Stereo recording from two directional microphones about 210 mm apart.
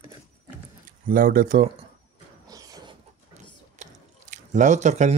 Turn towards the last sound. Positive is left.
turn(degrees=-35)  # may be behind; listen again after turning